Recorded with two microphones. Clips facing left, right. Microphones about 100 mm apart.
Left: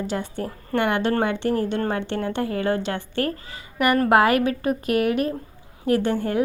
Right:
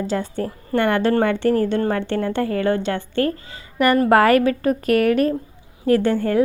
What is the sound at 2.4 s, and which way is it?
Speech, 25° left (ahead or behind).